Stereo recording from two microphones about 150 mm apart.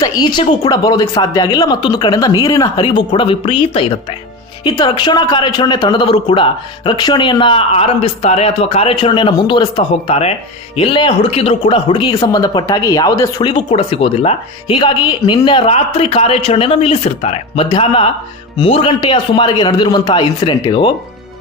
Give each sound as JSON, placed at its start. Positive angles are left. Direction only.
{"t": 0.0, "sound": "a man's voice", "side_deg": 25}
{"t": 10.0, "sound": "speech", "side_deg": 45}
{"t": 10.8, "sound": "a man's voice", "side_deg": 35}
{"t": 13.7, "sound": "a man's voice", "side_deg": 40}